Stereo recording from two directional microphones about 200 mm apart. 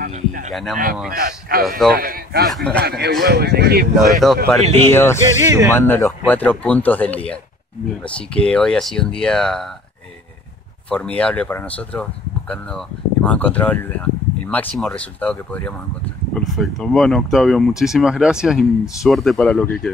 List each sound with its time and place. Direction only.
0.0 s a sound: 40° right (ahead or behind)
0.5 s speech: centre (ahead or behind)
1.1 s speech: 45° right (ahead or behind)
2.5 s speech: 5° left (ahead or behind)
2.8 s speech: 55° right (ahead or behind)
3.9 s speech: centre (ahead or behind)
4.9 s speech: 10° left (ahead or behind)
5.4 s speech: 15° right (ahead or behind)
5.8 s speech: 10° left (ahead or behind)
10.9 s speech: 5° left (ahead or behind)